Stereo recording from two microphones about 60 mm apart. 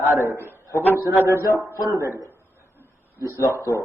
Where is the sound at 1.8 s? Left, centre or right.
Right.